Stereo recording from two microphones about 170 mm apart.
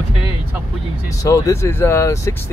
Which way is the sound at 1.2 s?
20° left (ahead or behind).